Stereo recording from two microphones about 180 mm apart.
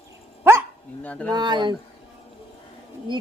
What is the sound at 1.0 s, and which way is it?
Speech, 5° left (ahead or behind).